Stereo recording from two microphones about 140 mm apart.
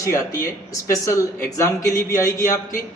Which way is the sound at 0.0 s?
20° left (ahead or behind).